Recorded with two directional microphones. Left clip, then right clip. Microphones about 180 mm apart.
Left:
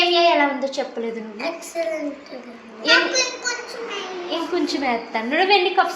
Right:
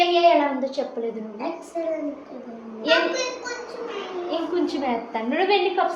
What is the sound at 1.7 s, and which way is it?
Speech, 15° right (ahead or behind).